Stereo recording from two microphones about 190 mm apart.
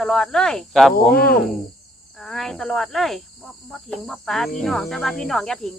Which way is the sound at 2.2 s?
Centre (ahead or behind).